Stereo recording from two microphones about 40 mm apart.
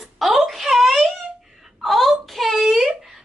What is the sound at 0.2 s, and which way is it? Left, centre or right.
Wail, centre.